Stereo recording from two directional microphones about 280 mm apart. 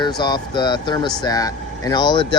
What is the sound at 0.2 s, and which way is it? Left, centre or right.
Speech, centre.